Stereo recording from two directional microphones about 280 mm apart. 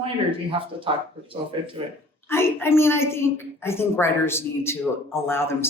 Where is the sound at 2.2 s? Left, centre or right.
Centre.